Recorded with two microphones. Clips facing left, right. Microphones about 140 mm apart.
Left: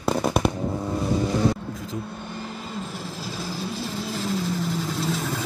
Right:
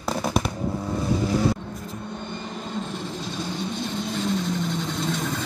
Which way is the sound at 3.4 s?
5° left (ahead or behind).